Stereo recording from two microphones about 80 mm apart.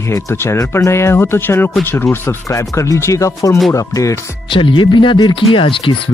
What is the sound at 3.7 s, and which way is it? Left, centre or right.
Music, left.